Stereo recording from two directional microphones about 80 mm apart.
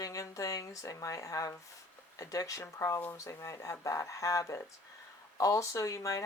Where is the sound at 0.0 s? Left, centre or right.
Left.